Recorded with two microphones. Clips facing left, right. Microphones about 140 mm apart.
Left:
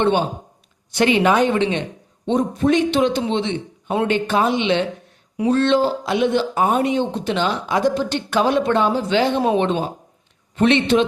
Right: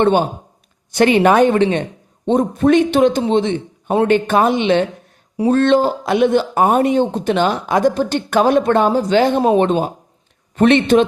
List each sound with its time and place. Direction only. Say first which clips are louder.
0.0 s speech: right 4 dB; 45° right (ahead or behind)